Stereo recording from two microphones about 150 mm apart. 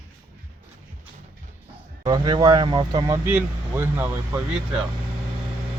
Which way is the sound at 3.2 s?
15° right (ahead or behind).